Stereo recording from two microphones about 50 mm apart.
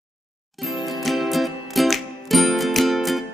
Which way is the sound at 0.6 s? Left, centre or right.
Centre.